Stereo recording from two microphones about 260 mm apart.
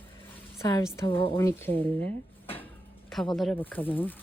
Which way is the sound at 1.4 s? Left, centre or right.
Centre.